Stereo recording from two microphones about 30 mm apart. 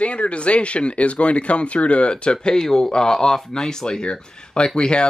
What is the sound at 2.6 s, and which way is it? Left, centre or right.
A man's voice, centre.